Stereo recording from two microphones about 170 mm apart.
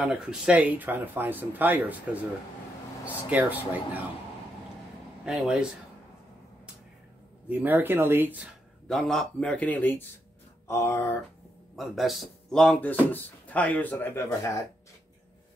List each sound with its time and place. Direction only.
0.0 s speech: 5° right (ahead or behind)
3.3 s speech: 10° right (ahead or behind)
5.2 s speech: centre (ahead or behind)
7.4 s speech: 10° right (ahead or behind)
8.8 s speech: 5° left (ahead or behind)
11.7 s a man's voice: centre (ahead or behind); by 14.6 s 15° left (ahead or behind)